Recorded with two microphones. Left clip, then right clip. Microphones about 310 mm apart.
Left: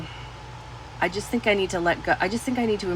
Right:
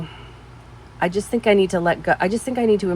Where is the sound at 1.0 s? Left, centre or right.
Right.